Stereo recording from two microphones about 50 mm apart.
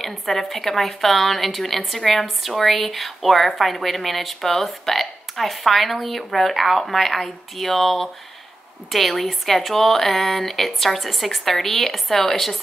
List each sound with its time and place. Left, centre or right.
0.0 s a woman's voice: centre